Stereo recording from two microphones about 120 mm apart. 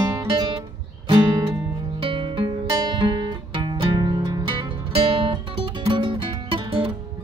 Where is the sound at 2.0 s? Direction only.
45° right (ahead or behind).